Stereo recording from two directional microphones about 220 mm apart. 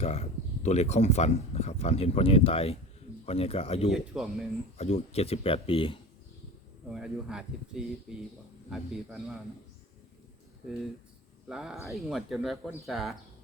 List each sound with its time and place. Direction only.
0.0 s speech: 30° left (ahead or behind)
3.9 s speech: centre (ahead or behind)
4.8 s speech: 30° left (ahead or behind)
6.9 s speech: 5° right (ahead or behind)
11.4 s speech: 5° right (ahead or behind)